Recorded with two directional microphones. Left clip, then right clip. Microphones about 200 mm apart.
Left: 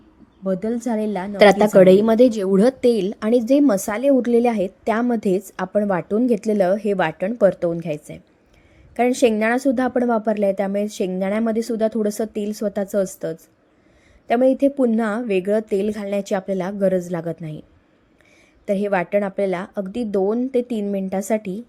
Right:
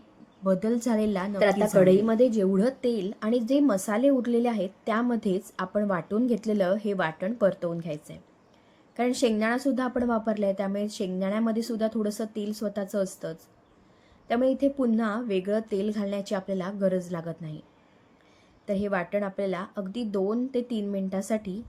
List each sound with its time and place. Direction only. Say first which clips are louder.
0.4 s a woman's voice: left 3 dB; 10° left (ahead or behind)
1.4 s a woman's voice: left 10 dB; 50° left (ahead or behind); by 17.6 s 35° left (ahead or behind)
18.6 s a woman's voice: left 8 dB; 35° left (ahead or behind)